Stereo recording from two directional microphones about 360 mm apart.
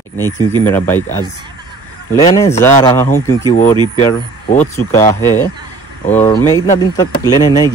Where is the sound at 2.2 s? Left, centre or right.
Centre.